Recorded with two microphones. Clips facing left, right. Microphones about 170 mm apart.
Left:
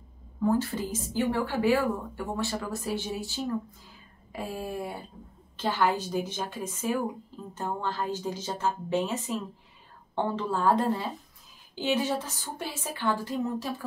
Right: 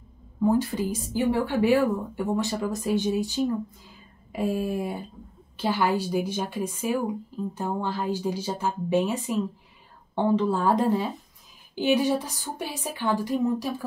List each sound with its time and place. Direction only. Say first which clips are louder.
0.4 s a woman's voice: right 3 dB; 15° right (ahead or behind)